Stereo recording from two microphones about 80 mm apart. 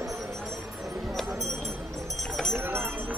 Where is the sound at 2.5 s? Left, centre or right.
Right.